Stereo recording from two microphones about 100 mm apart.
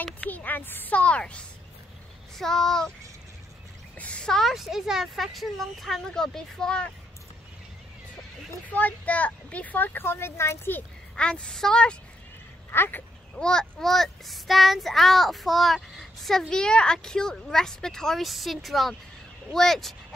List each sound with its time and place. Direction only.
0.0 s speech: 15° left (ahead or behind)
2.3 s child singing: 5° left (ahead or behind)
4.0 s child singing: 10° left (ahead or behind)
8.6 s speech: 15° left (ahead or behind)
11.1 s speech: 10° left (ahead or behind)
12.7 s speech: 25° left (ahead or behind)
13.4 s child singing: 10° left (ahead or behind)